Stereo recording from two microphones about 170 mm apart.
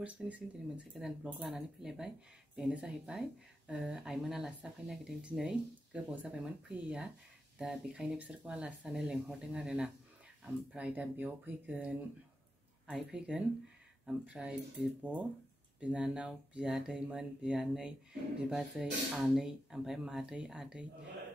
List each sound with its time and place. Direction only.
0.0 s speech: 5° right (ahead or behind)
15.8 s speech: 5° right (ahead or behind)